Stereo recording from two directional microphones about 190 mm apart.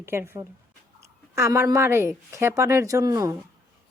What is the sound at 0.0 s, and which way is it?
Speech, 15° right (ahead or behind).